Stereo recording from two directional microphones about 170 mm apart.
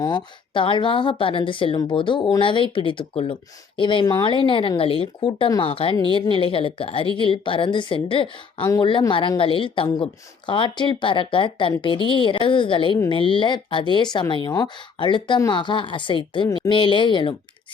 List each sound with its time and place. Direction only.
0.0 s speech: 25° left (ahead or behind)